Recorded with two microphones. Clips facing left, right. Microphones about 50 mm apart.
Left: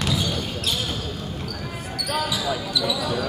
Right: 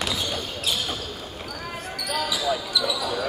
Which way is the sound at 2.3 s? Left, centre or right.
Centre.